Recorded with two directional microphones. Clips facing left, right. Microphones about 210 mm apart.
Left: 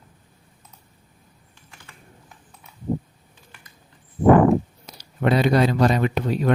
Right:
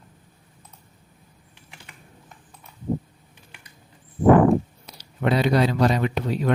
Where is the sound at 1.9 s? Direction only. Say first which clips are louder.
Even; 15° right (ahead or behind).